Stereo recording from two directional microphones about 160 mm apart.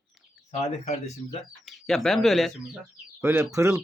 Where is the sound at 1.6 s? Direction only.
Centre (ahead or behind).